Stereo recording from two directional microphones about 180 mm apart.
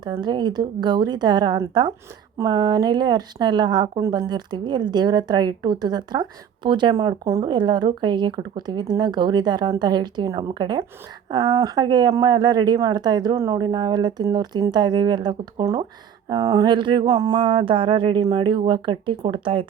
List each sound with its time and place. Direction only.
0.0 s speech: 25° right (ahead or behind)